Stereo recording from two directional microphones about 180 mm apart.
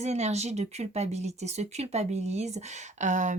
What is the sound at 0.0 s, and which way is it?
Speech, 40° right (ahead or behind).